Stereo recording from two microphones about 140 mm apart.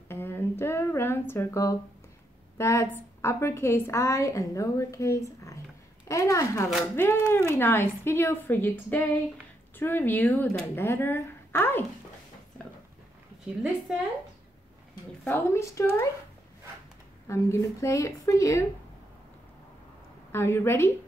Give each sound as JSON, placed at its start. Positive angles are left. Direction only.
{"t": 0.1, "sound": "a woman's voice", "side_deg": 15}
{"t": 13.6, "sound": "a woman's voice", "side_deg": -5}
{"t": 15.2, "sound": "a woman's voice", "side_deg": 15}
{"t": 17.3, "sound": "a woman's voice", "side_deg": 20}
{"t": 20.2, "sound": "speech", "side_deg": 15}